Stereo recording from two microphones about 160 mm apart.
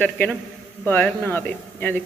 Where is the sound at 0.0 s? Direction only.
10° left (ahead or behind).